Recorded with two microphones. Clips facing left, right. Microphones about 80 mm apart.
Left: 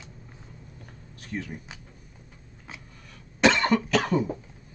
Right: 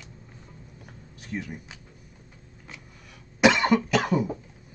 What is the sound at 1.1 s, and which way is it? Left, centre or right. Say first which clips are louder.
Speech: even; centre.